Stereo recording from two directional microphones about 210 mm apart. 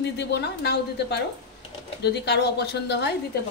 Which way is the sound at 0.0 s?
55° left (ahead or behind).